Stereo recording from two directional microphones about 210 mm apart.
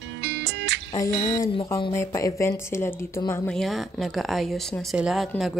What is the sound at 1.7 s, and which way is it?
Speech, 15° left (ahead or behind).